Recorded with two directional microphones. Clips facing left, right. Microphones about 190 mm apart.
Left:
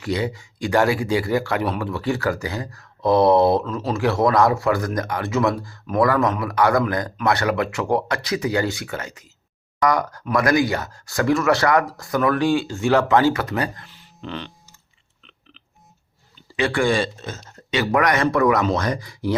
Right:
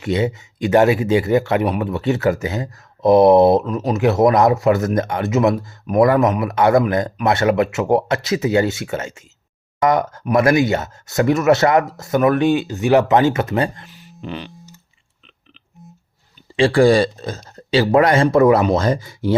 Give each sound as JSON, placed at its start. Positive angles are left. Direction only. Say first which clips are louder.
{"t": 0.0, "sound": "speech", "louder": "right 4 dB", "side_deg": -25}
{"t": 16.6, "sound": "speech", "louder": "right 7 dB", "side_deg": -30}